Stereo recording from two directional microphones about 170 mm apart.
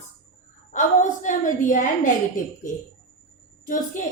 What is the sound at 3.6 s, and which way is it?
Speech, 50° left (ahead or behind).